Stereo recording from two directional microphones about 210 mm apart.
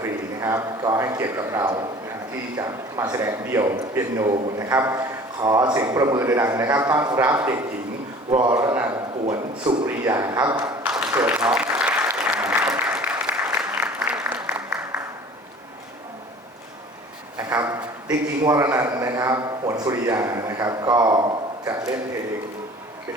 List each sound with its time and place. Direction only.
0.0 s a man's voice: 15° right (ahead or behind)
8.3 s speech: 20° right (ahead or behind)
9.2 s a man's voice: 30° right (ahead or behind)
9.8 s speech: 15° right (ahead or behind)
10.8 s a sound: 5° right (ahead or behind)
11.3 s applause: 5° right (ahead or behind)
17.3 s a sound: 10° right (ahead or behind)
18.4 s speech: 15° right (ahead or behind)